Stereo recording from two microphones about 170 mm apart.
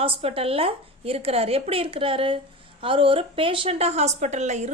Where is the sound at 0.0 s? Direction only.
35° right (ahead or behind).